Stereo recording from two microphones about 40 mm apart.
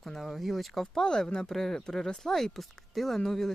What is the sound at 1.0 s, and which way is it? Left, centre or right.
Speech, centre.